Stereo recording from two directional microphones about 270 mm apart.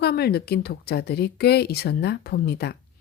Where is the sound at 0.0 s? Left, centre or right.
Left.